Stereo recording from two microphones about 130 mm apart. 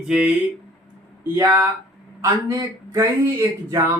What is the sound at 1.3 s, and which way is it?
Speech, 20° right (ahead or behind).